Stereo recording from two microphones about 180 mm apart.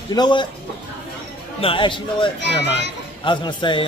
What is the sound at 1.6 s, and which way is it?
A man's voice, 30° left (ahead or behind).